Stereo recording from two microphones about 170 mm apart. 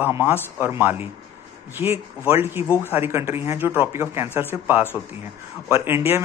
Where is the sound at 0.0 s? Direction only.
10° right (ahead or behind).